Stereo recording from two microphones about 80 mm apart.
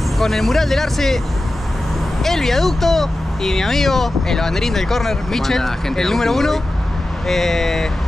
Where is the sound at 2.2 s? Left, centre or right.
Centre.